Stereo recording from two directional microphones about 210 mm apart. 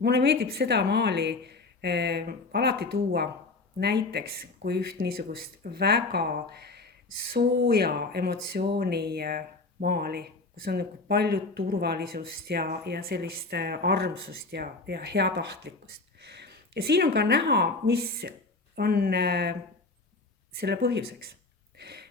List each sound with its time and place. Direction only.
0.0 s speech: 50° right (ahead or behind)
20.6 s speech: 50° right (ahead or behind)
21.8 s a sound: 50° right (ahead or behind)